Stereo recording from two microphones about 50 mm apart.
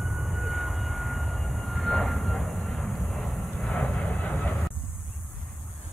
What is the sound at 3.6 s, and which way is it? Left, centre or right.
Vehicle, centre.